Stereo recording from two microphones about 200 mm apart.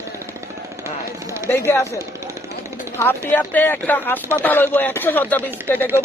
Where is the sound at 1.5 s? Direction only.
15° left (ahead or behind).